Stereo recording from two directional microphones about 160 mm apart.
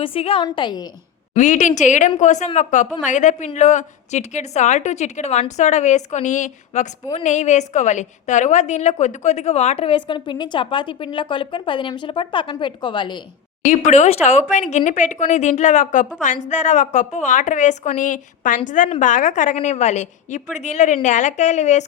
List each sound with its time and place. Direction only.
0.0 s a woman's voice: 35° left (ahead or behind)
1.3 s a woman's voice: 50° left (ahead or behind); by 13.2 s 30° left (ahead or behind)
13.7 s a woman's voice: 50° left (ahead or behind)